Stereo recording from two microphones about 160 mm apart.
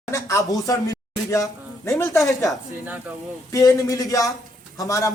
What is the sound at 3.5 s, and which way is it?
Speech, 20° left (ahead or behind).